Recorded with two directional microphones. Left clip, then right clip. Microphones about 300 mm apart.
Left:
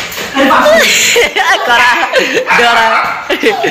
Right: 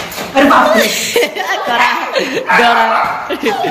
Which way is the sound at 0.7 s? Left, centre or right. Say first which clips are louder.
Left 5 dB; centre.